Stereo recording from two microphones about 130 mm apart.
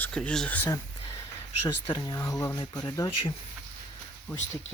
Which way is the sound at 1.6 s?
30° left (ahead or behind).